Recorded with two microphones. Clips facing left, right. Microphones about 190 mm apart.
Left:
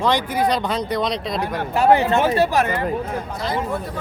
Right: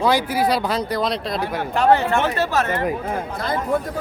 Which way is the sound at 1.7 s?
10° left (ahead or behind).